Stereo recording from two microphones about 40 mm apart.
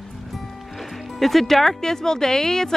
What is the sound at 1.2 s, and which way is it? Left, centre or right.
Speech, centre.